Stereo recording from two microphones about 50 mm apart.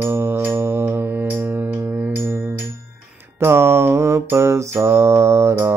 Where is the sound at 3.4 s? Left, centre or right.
Right.